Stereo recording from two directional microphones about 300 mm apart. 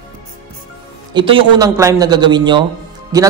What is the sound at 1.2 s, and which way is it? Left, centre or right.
A man's voice, centre.